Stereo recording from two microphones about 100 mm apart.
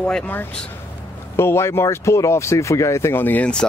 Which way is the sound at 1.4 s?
25° left (ahead or behind).